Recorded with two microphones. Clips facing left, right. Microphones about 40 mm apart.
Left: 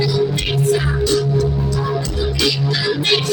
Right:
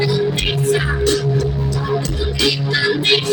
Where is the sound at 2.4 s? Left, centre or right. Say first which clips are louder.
Right 3 dB; right.